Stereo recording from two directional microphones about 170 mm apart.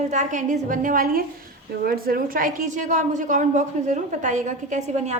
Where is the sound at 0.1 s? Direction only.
45° right (ahead or behind).